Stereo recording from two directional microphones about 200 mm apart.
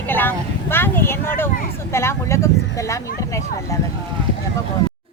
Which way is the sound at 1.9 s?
15° left (ahead or behind).